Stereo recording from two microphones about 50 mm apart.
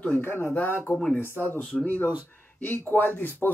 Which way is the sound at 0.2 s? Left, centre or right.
Left.